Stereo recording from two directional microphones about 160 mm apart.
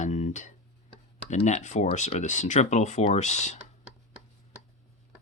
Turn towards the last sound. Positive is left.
turn(degrees=45)  # may be behind; listen again after turning